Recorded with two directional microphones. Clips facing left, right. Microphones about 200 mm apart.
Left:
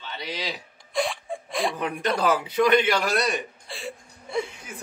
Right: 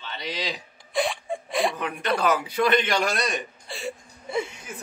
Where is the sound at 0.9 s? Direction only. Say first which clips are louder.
Right 1 dB; centre (ahead or behind).